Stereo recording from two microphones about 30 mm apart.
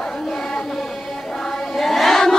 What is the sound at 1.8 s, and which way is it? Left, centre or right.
Choir, centre.